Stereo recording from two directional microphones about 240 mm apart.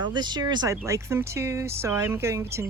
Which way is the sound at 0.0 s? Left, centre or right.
Centre.